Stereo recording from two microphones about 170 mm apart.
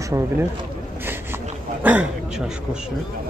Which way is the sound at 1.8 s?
10° right (ahead or behind).